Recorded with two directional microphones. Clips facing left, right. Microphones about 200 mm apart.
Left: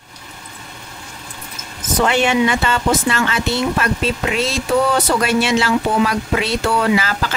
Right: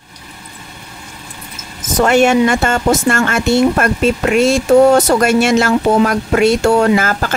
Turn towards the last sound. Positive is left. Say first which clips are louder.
# right 4 dB
turn(degrees=-50)  # may be behind; listen again after turning